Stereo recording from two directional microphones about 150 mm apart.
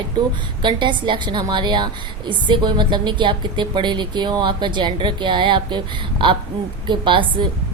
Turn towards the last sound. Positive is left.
turn(degrees=-35)  # may be behind; listen again after turning